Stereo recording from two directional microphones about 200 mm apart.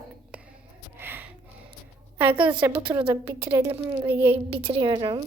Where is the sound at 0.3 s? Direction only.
5° right (ahead or behind).